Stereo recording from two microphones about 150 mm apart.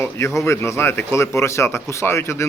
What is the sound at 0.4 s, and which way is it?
Speech, 20° left (ahead or behind).